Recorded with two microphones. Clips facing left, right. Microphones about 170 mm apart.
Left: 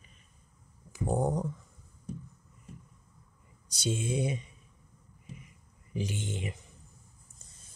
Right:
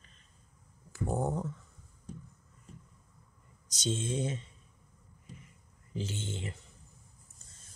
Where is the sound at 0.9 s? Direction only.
15° left (ahead or behind).